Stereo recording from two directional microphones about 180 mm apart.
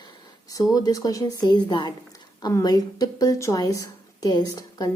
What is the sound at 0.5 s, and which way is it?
A woman's voice, 20° left (ahead or behind).